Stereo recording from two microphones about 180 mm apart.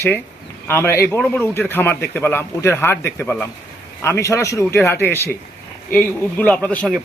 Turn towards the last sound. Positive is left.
turn(degrees=5)  # may be behind; listen again after turning